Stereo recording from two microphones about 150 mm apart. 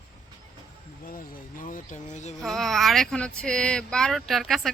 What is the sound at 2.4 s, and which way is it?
Speech, centre (ahead or behind).